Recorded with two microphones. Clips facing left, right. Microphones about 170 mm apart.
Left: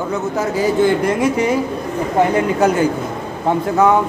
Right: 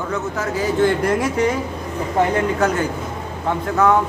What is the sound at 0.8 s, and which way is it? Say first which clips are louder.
Speech: left 1 dB; centre (ahead or behind).